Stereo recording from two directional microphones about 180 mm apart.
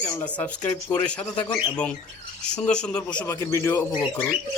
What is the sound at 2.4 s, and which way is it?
Speech, 5° left (ahead or behind).